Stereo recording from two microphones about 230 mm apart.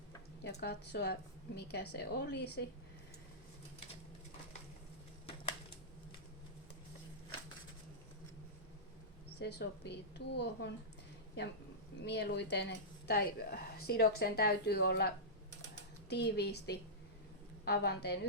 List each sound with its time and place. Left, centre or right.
0.6 s a woman's voice: left
9.4 s a woman's voice: left
12.0 s a woman's voice: left